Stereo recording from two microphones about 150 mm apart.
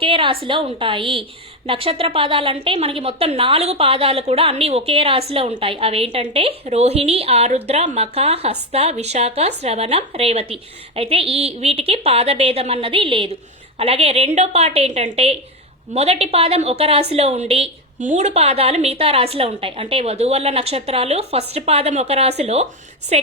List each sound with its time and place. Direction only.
0.0 s a woman's voice: 35° right (ahead or behind)